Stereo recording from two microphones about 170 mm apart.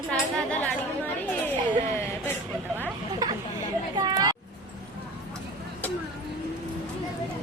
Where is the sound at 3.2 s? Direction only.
20° right (ahead or behind).